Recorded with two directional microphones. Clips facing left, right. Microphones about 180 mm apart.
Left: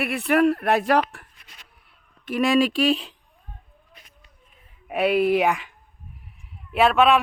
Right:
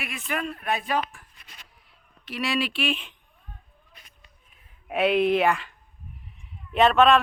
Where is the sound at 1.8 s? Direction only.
55° left (ahead or behind); by 3.2 s 35° left (ahead or behind).